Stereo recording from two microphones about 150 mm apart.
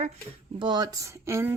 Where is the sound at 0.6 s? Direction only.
30° right (ahead or behind).